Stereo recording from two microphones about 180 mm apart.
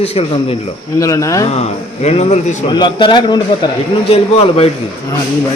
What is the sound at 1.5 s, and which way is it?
Speech, 35° left (ahead or behind).